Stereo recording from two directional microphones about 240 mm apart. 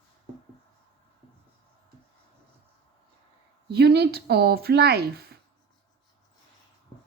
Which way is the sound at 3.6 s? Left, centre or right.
Right.